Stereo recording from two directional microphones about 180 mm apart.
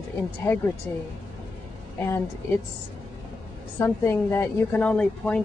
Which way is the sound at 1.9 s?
15° left (ahead or behind).